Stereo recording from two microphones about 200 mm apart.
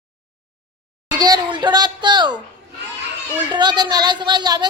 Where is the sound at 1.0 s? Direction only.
20° right (ahead or behind).